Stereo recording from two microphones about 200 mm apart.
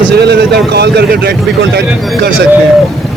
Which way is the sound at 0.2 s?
55° right (ahead or behind).